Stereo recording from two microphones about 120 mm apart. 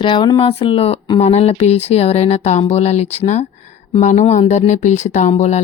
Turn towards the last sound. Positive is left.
turn(degrees=65)  # may be behind; listen again after turning